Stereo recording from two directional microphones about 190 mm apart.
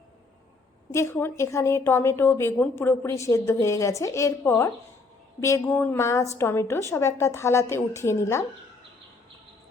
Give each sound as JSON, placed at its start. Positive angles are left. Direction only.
{"t": 0.9, "sound": "a woman's voice", "side_deg": 15}